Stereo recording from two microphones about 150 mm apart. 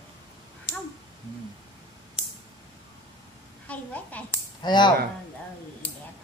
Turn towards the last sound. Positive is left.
turn(degrees=30)  # may be behind; listen again after turning